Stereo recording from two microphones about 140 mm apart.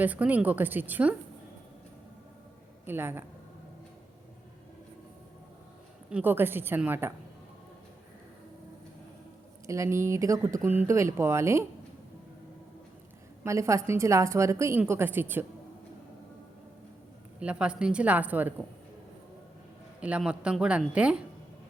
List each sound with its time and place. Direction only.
0.0 s speech: 10° right (ahead or behind)
2.8 s speech: 15° right (ahead or behind)
6.1 s speech: 10° right (ahead or behind)
9.6 s a woman's voice: 20° right (ahead or behind)
13.4 s a woman's voice: 20° right (ahead or behind)
17.4 s speech: 10° right (ahead or behind)
20.0 s speech: 10° right (ahead or behind)